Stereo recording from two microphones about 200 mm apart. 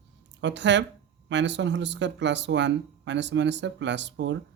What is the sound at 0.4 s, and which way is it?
Speech, 60° right (ahead or behind).